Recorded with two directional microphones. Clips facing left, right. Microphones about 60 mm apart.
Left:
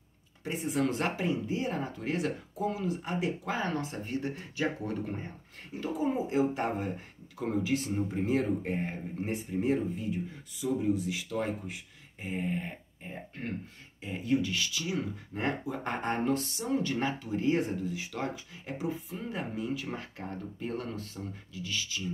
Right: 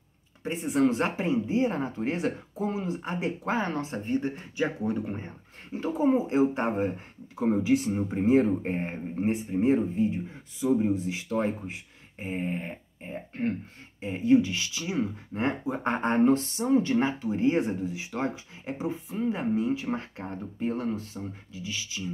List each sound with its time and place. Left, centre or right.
0.4 s speech: right